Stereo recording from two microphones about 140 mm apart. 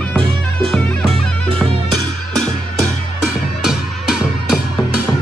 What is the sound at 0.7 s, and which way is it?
Music, 5° left (ahead or behind).